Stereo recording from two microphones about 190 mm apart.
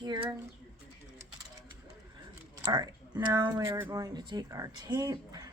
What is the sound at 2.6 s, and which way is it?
Speech, 20° right (ahead or behind).